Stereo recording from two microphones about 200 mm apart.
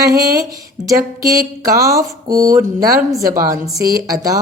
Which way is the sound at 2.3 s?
45° right (ahead or behind).